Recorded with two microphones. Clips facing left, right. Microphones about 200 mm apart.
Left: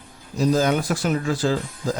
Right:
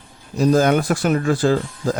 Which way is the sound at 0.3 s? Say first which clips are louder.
Right 4 dB; 55° right (ahead or behind).